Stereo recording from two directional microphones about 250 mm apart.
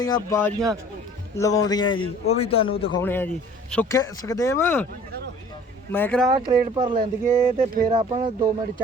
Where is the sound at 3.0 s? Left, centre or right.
Centre.